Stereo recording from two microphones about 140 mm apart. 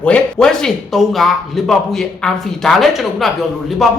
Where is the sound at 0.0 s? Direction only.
5° left (ahead or behind).